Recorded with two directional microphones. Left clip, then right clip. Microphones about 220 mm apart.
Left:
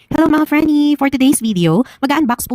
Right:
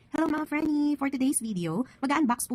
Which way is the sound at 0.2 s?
40° left (ahead or behind).